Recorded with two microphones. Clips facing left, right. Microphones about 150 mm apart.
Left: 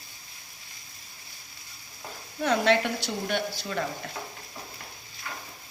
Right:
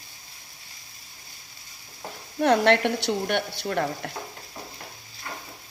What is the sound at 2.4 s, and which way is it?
A woman's voice, 60° right (ahead or behind).